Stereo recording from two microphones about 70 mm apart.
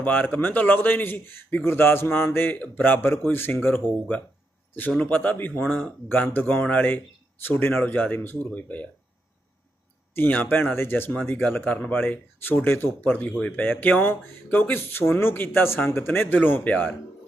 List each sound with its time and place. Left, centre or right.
0.0 s a man's voice: left
4.9 s a man's voice: left
10.2 s a man's voice: left
11.4 s a man's voice: left